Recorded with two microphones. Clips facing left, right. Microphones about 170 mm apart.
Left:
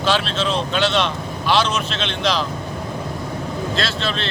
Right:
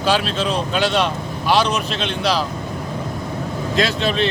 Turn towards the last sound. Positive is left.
turn(degrees=-15)  # may be behind; listen again after turning